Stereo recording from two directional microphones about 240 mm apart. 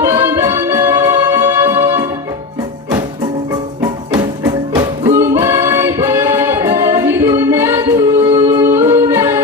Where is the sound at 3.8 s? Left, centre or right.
Centre.